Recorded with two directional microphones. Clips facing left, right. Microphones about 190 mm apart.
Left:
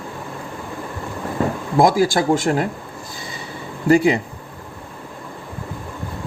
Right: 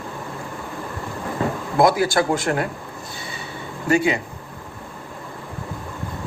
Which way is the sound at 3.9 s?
35° left (ahead or behind).